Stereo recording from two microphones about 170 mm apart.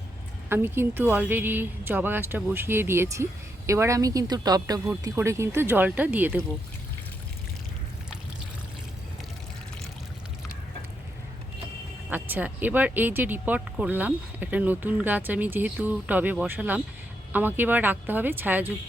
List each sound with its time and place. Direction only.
0.4 s speech: 15° right (ahead or behind)
12.1 s speech: 10° right (ahead or behind)